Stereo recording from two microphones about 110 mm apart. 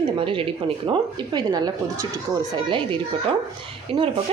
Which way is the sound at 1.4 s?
40° right (ahead or behind).